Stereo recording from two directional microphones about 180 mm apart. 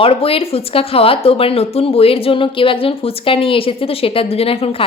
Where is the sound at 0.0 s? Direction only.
30° left (ahead or behind).